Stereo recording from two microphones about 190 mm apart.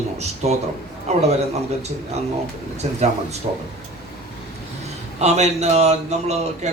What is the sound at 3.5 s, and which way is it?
Speech, 25° right (ahead or behind).